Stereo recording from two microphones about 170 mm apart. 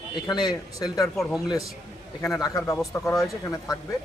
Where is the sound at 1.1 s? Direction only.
Centre (ahead or behind).